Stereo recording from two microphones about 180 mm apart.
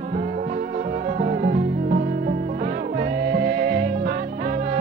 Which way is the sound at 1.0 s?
50° right (ahead or behind).